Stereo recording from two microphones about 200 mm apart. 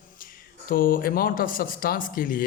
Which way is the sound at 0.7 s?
45° left (ahead or behind).